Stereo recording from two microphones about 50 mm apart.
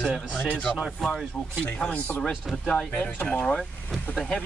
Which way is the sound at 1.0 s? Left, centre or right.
Centre.